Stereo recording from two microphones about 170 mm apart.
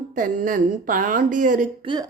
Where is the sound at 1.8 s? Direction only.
30° right (ahead or behind).